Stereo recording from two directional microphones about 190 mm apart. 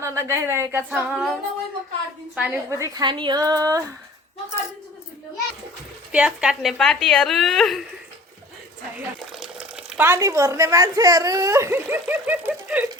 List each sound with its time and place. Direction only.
0.0 s a woman's voice: 15° right (ahead or behind)
6.1 s a woman's voice: 5° right (ahead or behind)
9.0 s speech: centre (ahead or behind)